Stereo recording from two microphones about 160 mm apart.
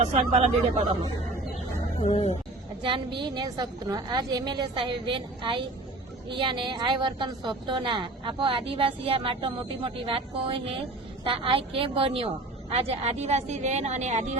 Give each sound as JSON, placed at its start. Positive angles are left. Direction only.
{"t": 0.0, "sound": "a woman's voice", "side_deg": -40}
{"t": 2.0, "sound": "speech", "side_deg": 40}
{"t": 2.8, "sound": "a woman's voice", "side_deg": -30}